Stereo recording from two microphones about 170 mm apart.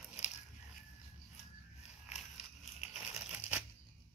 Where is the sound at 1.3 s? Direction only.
40° left (ahead or behind).